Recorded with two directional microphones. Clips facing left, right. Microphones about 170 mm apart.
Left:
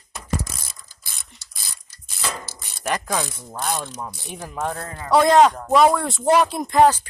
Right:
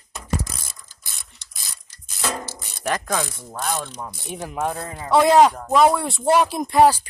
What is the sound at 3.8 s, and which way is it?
Ratchet, 10° left (ahead or behind).